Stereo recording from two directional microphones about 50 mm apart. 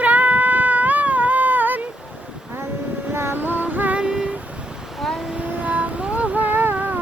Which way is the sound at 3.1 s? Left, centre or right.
Right.